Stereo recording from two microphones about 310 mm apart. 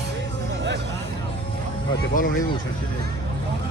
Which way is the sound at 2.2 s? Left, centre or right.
Left.